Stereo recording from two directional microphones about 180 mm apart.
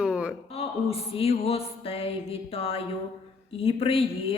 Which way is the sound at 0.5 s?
35° left (ahead or behind).